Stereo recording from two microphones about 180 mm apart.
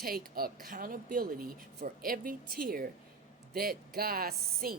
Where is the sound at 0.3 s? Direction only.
55° right (ahead or behind).